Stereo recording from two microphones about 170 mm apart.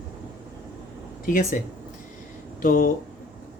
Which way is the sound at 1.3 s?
50° left (ahead or behind).